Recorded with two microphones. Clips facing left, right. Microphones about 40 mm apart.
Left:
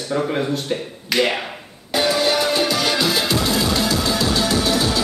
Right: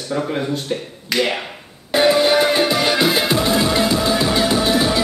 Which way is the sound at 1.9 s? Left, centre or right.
Right.